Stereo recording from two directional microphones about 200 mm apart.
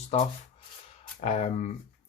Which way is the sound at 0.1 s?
30° left (ahead or behind).